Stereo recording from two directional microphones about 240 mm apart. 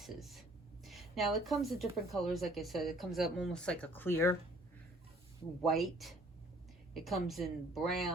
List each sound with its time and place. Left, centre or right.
0.0 s speech: centre
5.6 s speech: centre